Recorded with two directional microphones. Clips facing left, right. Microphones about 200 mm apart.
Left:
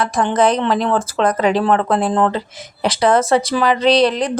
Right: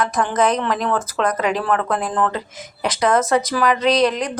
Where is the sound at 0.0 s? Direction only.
30° left (ahead or behind).